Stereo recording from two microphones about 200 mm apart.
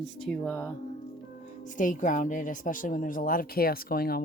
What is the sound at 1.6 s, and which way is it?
A woman's voice, 40° left (ahead or behind).